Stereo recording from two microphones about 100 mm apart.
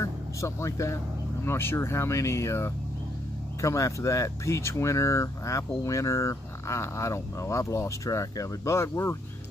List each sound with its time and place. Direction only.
0.0 s music: 30° left (ahead or behind)
1.4 s speech: 25° left (ahead or behind)